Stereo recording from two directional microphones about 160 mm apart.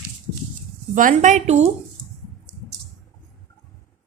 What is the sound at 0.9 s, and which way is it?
Speech, 55° right (ahead or behind).